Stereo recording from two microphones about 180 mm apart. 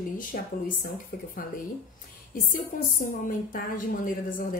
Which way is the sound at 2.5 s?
50° left (ahead or behind).